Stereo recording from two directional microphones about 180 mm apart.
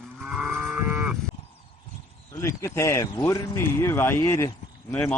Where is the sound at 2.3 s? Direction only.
15° left (ahead or behind).